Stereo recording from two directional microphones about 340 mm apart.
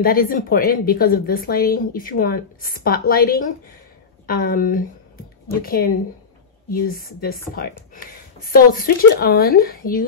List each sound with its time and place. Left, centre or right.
0.0 s a woman's voice: left